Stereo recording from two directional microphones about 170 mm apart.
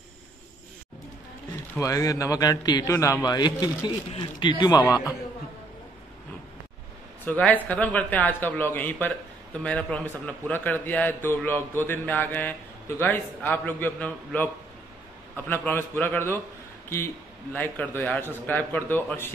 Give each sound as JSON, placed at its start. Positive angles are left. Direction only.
{"t": 1.8, "sound": "a man's voice", "side_deg": 20}
{"t": 7.2, "sound": "a man's voice", "side_deg": 10}